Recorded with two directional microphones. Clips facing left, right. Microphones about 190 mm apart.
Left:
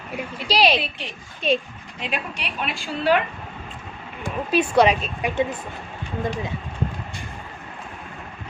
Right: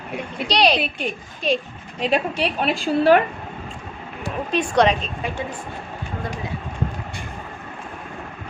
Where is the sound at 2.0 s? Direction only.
35° right (ahead or behind).